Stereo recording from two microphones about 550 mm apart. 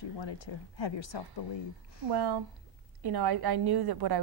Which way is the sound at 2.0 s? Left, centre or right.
Right.